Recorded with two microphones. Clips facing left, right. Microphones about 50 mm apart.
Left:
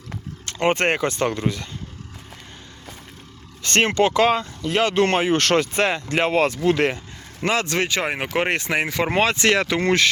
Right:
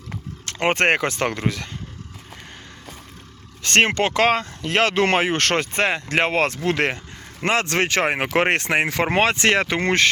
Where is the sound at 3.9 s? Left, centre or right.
Right.